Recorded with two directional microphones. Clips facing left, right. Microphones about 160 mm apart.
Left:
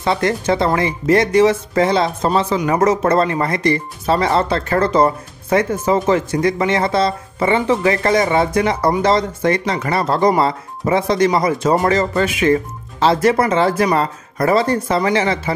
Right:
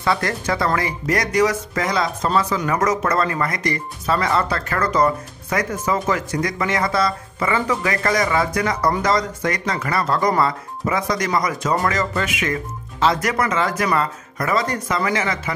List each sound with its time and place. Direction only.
0.0 s speech: 25° left (ahead or behind)